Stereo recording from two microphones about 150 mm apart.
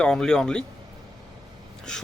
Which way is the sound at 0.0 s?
5° left (ahead or behind).